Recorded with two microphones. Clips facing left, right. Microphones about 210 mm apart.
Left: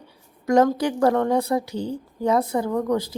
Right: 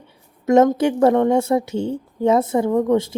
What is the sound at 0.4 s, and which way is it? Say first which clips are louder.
A woman's voice: right 4 dB; 20° right (ahead or behind).